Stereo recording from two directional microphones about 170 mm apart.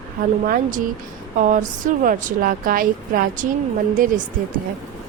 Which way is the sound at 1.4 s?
50° right (ahead or behind).